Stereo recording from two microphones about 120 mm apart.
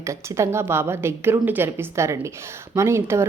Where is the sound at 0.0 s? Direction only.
25° right (ahead or behind).